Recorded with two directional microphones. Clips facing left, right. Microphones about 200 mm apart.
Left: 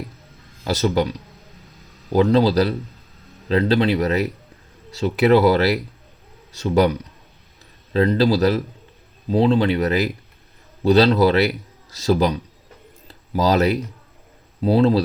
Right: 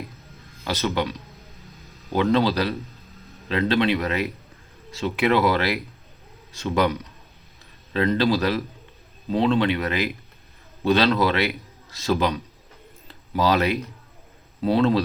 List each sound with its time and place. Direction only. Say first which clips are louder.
0.6 s a man's voice: left 5 dB; 35° left (ahead or behind)
2.1 s a man's voice: left 5 dB; 35° left (ahead or behind)
7.9 s a man's voice: left 4 dB; 35° left (ahead or behind)
13.1 s a sound: left 2 dB; 35° left (ahead or behind)
14.6 s a man's voice: left 3 dB; 35° left (ahead or behind)